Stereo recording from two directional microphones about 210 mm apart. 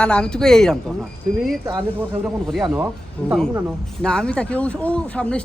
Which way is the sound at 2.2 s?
Centre (ahead or behind).